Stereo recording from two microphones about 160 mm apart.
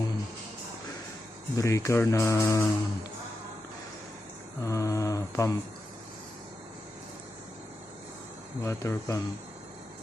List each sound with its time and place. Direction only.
1.5 s speech: 20° left (ahead or behind)
4.6 s mantra: 20° left (ahead or behind)
8.6 s speech: 20° left (ahead or behind)